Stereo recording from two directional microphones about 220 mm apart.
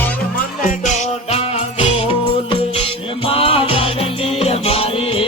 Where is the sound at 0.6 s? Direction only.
35° left (ahead or behind).